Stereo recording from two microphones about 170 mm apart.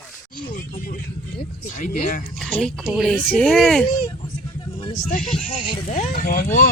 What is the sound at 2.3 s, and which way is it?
Speech, 5° left (ahead or behind).